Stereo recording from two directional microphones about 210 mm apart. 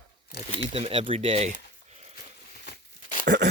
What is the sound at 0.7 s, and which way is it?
Speech, 25° right (ahead or behind).